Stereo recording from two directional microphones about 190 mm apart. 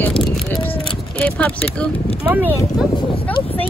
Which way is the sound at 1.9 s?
30° left (ahead or behind).